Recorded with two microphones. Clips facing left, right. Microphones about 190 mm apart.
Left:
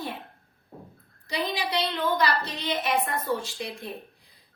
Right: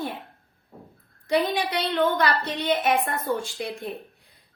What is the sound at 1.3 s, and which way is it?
A woman's voice, 55° right (ahead or behind).